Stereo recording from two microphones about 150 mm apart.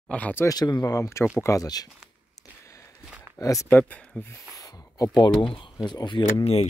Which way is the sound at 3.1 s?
10° right (ahead or behind).